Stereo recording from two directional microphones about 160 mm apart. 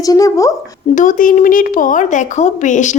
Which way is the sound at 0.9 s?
55° left (ahead or behind).